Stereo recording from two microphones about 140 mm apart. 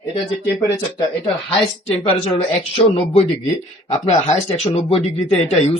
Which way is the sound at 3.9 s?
50° left (ahead or behind).